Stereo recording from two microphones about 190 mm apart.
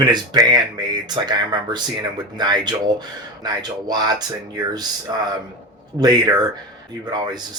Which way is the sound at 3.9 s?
20° right (ahead or behind).